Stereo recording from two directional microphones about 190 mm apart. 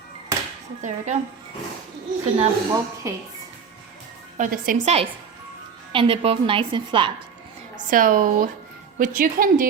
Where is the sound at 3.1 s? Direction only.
15° right (ahead or behind).